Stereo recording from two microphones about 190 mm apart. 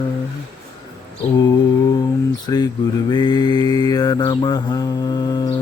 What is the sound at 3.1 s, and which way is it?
Mantra, 20° left (ahead or behind).